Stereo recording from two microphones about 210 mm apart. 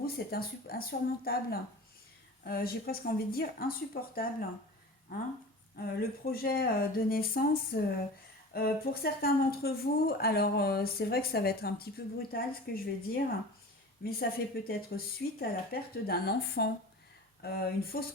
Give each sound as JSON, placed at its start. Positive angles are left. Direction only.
{"t": 0.0, "sound": "a woman's voice", "side_deg": 45}
{"t": 6.0, "sound": "a woman's voice", "side_deg": 45}